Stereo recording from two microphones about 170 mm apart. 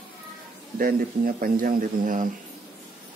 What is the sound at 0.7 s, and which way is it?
Speech, 60° right (ahead or behind).